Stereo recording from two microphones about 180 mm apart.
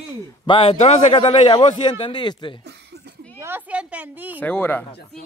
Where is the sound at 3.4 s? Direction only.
10° right (ahead or behind).